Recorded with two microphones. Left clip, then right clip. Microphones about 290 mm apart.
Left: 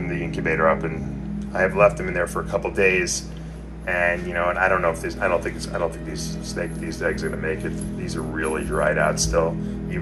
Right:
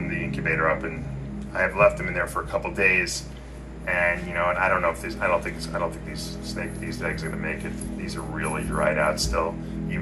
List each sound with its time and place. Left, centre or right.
0.4 s speech: centre
8.4 s speech: centre